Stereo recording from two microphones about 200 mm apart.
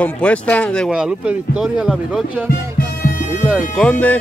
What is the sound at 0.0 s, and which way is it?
Speech, 5° left (ahead or behind).